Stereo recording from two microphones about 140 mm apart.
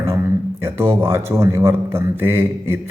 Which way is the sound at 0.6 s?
20° right (ahead or behind).